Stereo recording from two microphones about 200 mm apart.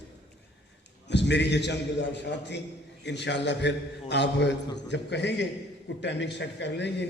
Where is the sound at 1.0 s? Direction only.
60° left (ahead or behind).